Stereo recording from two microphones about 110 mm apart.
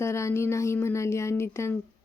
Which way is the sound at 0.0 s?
25° left (ahead or behind).